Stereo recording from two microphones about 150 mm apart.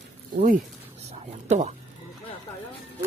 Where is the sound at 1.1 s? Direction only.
45° right (ahead or behind).